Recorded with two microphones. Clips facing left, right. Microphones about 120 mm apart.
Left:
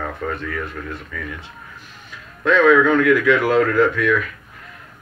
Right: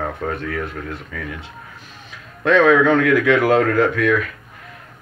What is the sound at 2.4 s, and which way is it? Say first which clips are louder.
A man's voice: right 1 dB; 65° right (ahead or behind).